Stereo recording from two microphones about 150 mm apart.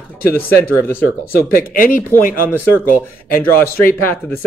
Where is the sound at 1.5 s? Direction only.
70° left (ahead or behind).